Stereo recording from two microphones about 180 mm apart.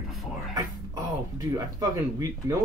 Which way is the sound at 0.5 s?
20° right (ahead or behind).